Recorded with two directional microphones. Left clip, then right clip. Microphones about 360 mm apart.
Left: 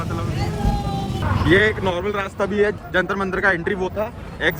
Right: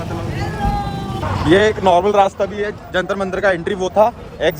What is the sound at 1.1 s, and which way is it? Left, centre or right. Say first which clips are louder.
Speech: right 3 dB; centre.